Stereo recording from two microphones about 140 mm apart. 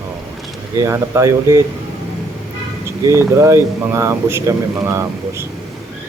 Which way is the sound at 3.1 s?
20° right (ahead or behind).